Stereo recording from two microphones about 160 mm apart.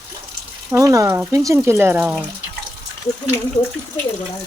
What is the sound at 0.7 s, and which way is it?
Speech, 20° right (ahead or behind).